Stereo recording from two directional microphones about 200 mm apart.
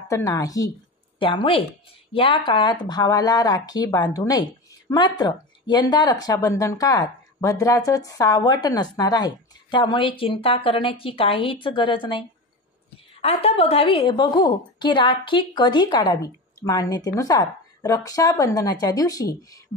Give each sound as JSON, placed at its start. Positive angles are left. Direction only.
{"t": 0.1, "sound": "a woman's voice", "side_deg": 15}
{"t": 13.2, "sound": "speech", "side_deg": 30}